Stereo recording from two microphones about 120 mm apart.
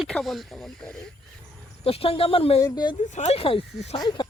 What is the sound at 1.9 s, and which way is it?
Speech, 50° left (ahead or behind).